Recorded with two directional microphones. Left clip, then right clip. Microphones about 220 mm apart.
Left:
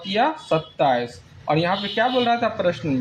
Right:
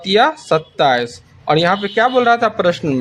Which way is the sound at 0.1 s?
45° right (ahead or behind).